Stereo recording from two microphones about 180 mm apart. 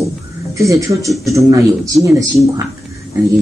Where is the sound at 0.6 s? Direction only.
15° right (ahead or behind).